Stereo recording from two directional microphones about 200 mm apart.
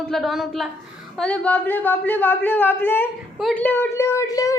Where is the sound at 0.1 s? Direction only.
Centre (ahead or behind).